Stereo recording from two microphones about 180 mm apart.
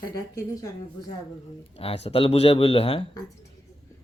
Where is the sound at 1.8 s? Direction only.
35° left (ahead or behind).